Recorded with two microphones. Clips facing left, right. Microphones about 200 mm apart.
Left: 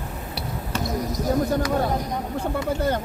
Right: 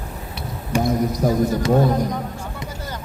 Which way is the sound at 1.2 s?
55° right (ahead or behind).